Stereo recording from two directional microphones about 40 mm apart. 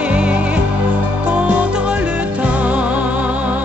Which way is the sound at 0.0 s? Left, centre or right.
Right.